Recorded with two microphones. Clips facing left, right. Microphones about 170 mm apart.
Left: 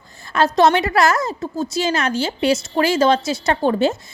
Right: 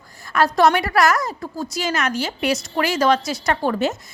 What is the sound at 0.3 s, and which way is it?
A woman's voice, 25° left (ahead or behind).